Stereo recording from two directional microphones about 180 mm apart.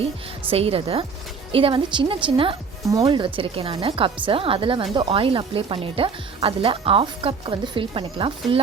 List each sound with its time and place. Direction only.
0.5 s a woman's voice: 35° right (ahead or behind)